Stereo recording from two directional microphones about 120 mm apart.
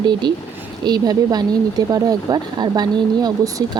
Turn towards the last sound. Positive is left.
turn(degrees=-30)  # may be behind; listen again after turning